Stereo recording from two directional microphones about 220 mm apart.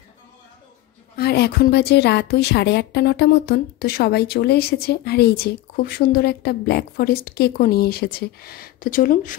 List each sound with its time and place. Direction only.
1.1 s a woman's voice: 45° left (ahead or behind)